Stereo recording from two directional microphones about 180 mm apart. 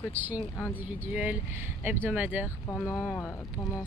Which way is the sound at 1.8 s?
10° right (ahead or behind).